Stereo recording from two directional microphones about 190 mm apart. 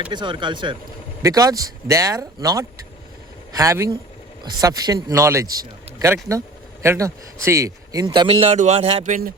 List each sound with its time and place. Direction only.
0.1 s speech: 25° right (ahead or behind); by 9.3 s 40° right (ahead or behind)